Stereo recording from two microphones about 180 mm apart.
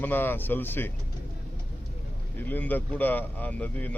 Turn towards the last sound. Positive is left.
turn(degrees=10)  # may be behind; listen again after turning